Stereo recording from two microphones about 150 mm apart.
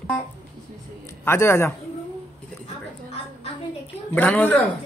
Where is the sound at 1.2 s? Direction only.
15° left (ahead or behind).